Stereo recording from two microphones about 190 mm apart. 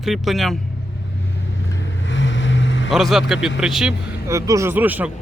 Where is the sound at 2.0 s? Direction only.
75° left (ahead or behind).